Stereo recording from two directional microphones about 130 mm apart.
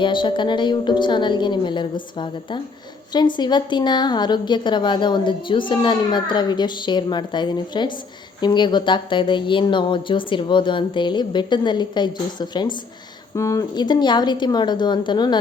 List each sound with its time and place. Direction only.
0.0 s speech: 40° left (ahead or behind)
13.3 s speech: 25° left (ahead or behind)